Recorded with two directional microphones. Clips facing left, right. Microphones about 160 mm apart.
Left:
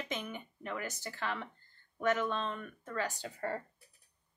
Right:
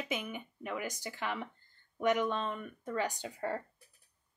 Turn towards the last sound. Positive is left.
turn(degrees=-10)  # may be behind; listen again after turning